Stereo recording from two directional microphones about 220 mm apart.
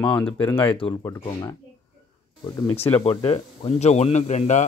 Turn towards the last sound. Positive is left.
turn(degrees=30)  # may be behind; listen again after turning